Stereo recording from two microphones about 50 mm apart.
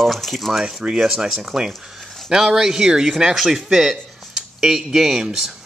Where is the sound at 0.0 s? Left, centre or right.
Centre.